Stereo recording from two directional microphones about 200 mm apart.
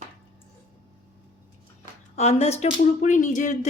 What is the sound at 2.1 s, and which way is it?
A woman's voice, 30° left (ahead or behind).